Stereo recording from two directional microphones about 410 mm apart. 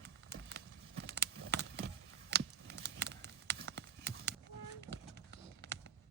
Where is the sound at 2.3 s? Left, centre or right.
Right.